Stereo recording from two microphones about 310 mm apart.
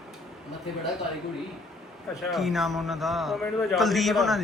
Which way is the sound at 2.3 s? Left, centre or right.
Centre.